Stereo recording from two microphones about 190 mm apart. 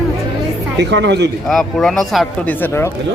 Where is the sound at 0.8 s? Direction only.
65° right (ahead or behind).